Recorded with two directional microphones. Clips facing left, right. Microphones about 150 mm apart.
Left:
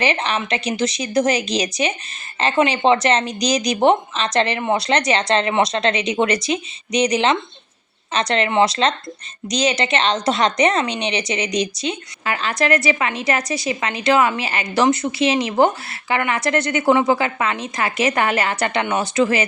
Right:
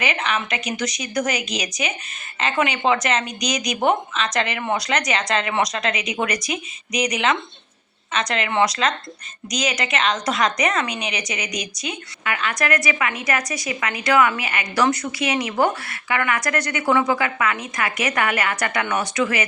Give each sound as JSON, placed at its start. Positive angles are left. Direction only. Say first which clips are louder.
{"t": 0.0, "sound": "a woman's voice", "louder": "left 3 dB", "side_deg": 30}